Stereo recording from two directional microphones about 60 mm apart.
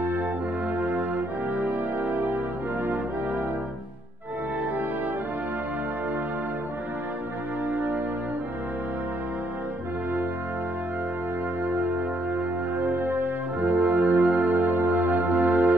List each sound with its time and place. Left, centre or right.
0.7 s music: right
7.7 s music: right
11.6 s music: right
12.7 s brass instrument: right